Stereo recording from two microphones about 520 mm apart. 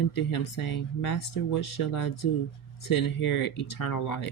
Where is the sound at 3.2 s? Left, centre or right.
Left.